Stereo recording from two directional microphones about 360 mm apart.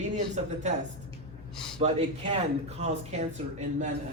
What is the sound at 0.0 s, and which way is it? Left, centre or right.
Speech, centre.